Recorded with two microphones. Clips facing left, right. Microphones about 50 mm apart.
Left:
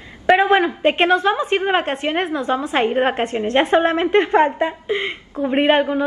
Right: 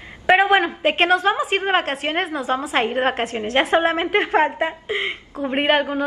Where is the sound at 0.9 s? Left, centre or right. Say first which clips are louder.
Left 1 dB; centre.